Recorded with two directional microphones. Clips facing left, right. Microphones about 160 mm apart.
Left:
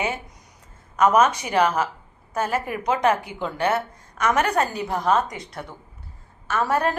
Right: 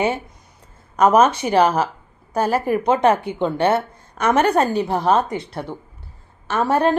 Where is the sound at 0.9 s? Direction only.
30° right (ahead or behind).